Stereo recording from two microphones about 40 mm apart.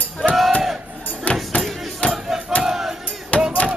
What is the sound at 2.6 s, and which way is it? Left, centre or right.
Battle cry, centre.